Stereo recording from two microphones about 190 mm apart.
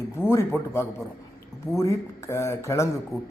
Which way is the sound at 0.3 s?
15° left (ahead or behind).